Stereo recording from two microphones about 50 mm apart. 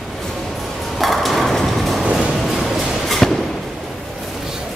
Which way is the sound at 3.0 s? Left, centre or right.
Centre.